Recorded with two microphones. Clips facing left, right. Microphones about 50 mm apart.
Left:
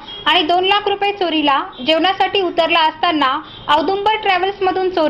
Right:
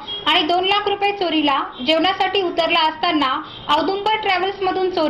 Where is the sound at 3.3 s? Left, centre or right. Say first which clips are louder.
Left 3 dB; centre.